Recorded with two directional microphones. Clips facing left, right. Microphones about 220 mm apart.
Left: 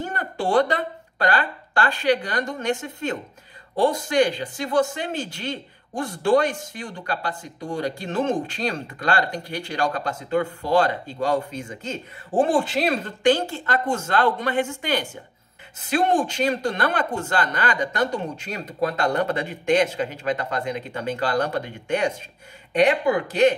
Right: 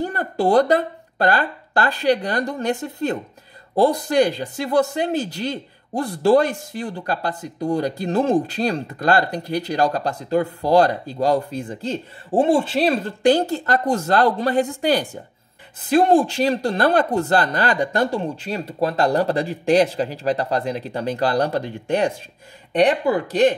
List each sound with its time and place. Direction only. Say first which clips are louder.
0.0 s speech: right 6 dB; 40° right (ahead or behind)